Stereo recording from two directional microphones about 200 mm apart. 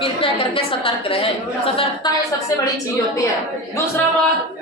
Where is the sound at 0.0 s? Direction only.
25° left (ahead or behind).